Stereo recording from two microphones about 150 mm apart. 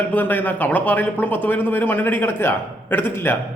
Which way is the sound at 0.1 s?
10° left (ahead or behind).